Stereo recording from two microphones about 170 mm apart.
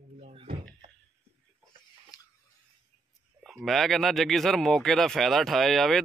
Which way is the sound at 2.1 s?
20° left (ahead or behind).